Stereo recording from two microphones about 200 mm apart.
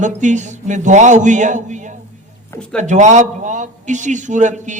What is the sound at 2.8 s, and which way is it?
A man's voice, 35° right (ahead or behind).